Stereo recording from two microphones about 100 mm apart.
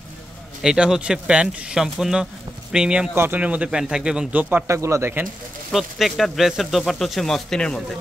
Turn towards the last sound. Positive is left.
turn(degrees=5)  # may be behind; listen again after turning